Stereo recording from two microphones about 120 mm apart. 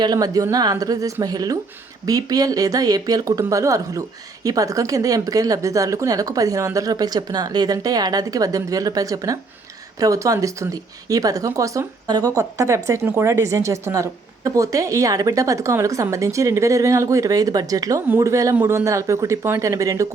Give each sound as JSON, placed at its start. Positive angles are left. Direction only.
{"t": 0.0, "sound": "a woman's voice", "side_deg": -35}
{"t": 18.5, "sound": "a woman's voice", "side_deg": -15}